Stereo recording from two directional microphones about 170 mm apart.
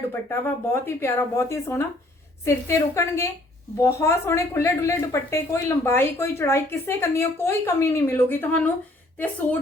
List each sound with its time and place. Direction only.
0.1 s a woman's voice: 15° left (ahead or behind)